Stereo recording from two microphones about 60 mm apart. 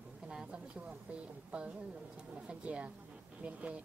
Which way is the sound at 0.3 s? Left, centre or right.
Centre.